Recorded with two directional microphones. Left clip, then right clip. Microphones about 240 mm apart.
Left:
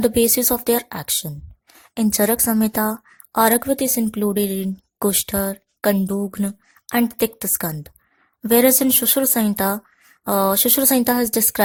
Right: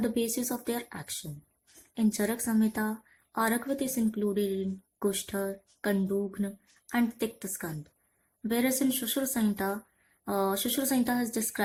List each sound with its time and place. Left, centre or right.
0.0 s a woman's voice: left